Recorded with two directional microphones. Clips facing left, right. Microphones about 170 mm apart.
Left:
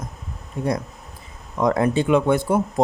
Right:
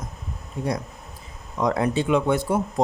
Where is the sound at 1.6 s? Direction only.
50° left (ahead or behind).